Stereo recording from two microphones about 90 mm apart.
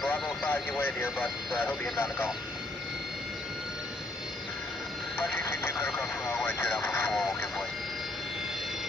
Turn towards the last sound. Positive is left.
turn(degrees=25)  # may be behind; listen again after turning